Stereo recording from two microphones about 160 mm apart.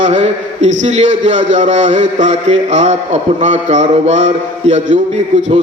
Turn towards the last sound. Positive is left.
turn(degrees=-45)  # may be behind; listen again after turning